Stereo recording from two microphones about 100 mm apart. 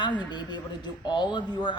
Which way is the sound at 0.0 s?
50° left (ahead or behind).